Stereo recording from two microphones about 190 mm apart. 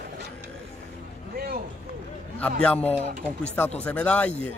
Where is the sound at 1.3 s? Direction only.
55° right (ahead or behind).